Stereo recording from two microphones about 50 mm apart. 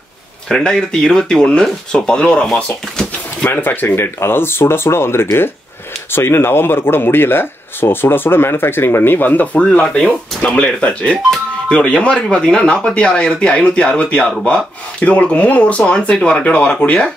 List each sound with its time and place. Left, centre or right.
0.7 s speech: centre
3.4 s speech: left